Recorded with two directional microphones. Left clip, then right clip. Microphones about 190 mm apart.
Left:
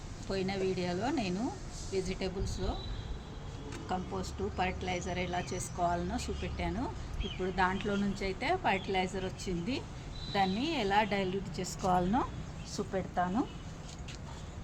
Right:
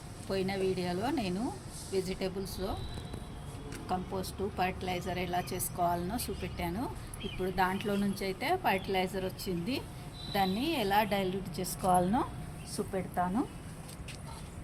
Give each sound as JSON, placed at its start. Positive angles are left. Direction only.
{"t": 0.3, "sound": "speech", "side_deg": 0}
{"t": 3.8, "sound": "a woman's voice", "side_deg": -10}